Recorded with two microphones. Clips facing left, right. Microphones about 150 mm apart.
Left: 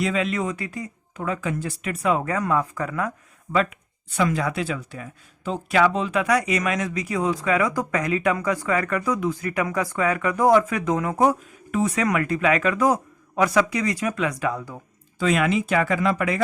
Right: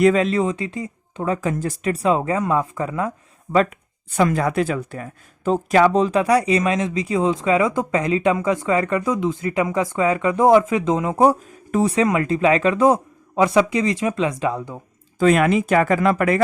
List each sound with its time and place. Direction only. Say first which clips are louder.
0.0 s speech: right 8 dB; 40° right (ahead or behind); by 3.6 s 25° right (ahead or behind)
4.1 s speech: right 4 dB; 45° right (ahead or behind); by 11.3 s 20° right (ahead or behind)
11.3 s speech: right 4 dB; 35° right (ahead or behind)
15.2 s speech: right 5 dB; 50° right (ahead or behind)